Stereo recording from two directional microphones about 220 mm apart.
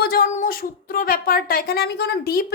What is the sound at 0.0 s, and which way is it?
Speech, 45° left (ahead or behind).